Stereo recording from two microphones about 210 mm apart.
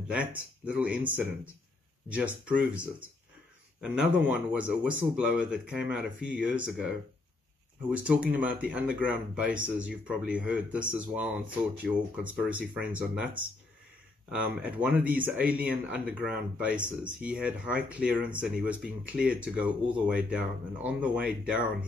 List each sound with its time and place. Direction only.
0.1 s speech: 5° right (ahead or behind)